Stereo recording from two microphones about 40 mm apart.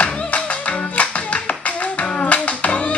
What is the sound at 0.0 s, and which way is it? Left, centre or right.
Music, left.